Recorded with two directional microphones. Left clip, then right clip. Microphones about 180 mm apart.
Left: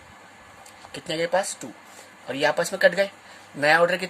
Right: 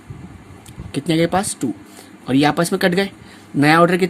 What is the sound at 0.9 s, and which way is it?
Speech, 50° right (ahead or behind).